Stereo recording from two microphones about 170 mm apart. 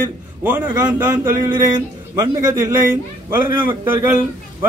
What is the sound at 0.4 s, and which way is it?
Speech, 15° right (ahead or behind).